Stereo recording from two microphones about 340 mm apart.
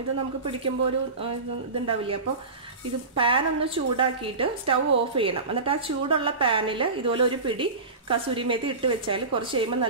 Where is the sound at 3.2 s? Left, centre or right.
Centre.